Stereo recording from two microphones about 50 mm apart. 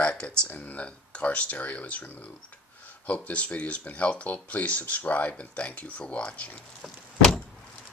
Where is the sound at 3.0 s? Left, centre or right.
Left.